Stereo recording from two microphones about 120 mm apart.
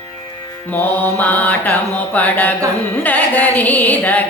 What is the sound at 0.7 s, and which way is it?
Mantra, 15° left (ahead or behind).